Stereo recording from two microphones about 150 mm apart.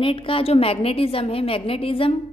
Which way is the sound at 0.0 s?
35° left (ahead or behind).